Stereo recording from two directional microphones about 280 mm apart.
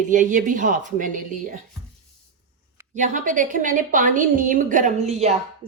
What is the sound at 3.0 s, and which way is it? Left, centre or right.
Speech, right.